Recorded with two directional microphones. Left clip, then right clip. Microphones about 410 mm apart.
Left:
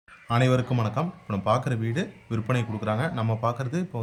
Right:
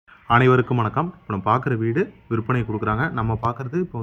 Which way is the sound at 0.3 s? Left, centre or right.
Centre.